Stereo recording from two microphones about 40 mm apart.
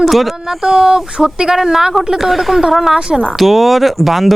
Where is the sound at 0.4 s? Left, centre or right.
Centre.